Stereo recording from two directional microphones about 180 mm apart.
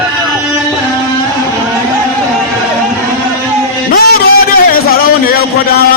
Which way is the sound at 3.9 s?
55° left (ahead or behind).